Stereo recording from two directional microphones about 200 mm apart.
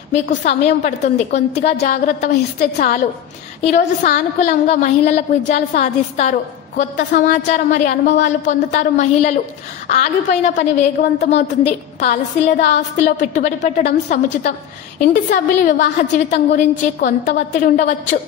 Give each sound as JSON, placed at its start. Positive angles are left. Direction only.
{"t": 0.1, "sound": "a woman's voice", "side_deg": 40}
{"t": 3.6, "sound": "a woman's voice", "side_deg": 40}